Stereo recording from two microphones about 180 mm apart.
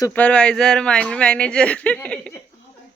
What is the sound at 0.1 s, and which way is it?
Speech, 10° left (ahead or behind).